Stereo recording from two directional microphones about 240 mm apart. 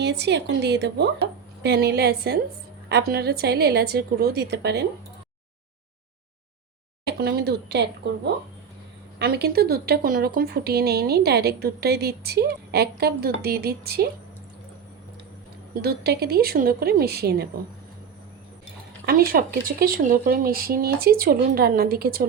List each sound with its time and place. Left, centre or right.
0.0 s a woman's voice: right
7.1 s a woman's voice: right
15.7 s speech: right
19.0 s speech: right